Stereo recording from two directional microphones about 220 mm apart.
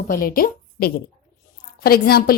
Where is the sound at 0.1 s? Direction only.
40° left (ahead or behind).